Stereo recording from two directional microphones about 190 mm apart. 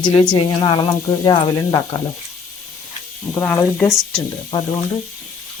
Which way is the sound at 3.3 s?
15° left (ahead or behind).